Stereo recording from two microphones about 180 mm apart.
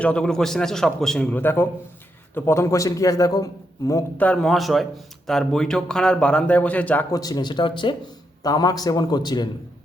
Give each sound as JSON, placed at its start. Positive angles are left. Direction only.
{"t": 0.0, "sound": "a man's voice", "side_deg": 5}
{"t": 4.3, "sound": "a man's voice", "side_deg": 0}
{"t": 7.1, "sound": "a man's voice", "side_deg": 20}